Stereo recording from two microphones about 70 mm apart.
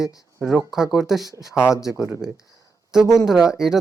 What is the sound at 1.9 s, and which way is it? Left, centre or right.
Speech, right.